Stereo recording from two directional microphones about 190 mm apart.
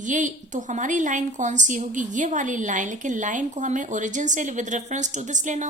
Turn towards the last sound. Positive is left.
turn(degrees=-40)  # may be behind; listen again after turning